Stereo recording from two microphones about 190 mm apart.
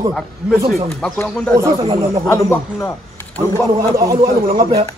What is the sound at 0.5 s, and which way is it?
Speech, 50° right (ahead or behind).